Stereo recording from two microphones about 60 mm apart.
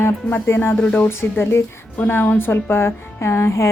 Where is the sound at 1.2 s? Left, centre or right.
Left.